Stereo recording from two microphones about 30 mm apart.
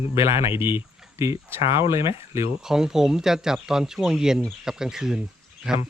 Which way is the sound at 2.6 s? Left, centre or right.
Centre.